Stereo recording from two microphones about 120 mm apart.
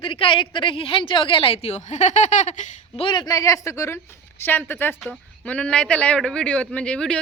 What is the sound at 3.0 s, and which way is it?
A man's voice, 40° left (ahead or behind).